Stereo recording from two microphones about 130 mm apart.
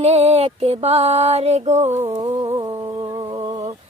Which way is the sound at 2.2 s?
30° right (ahead or behind).